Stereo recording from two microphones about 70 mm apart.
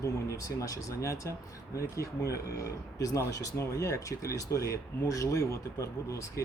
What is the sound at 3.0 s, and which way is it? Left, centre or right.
Speech, left.